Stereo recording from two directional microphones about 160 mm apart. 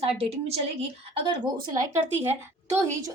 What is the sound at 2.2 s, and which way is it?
Speech, 15° right (ahead or behind).